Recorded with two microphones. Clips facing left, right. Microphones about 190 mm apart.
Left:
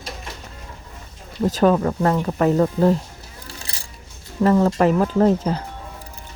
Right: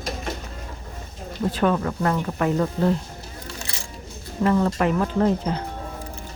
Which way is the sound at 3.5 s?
35° left (ahead or behind).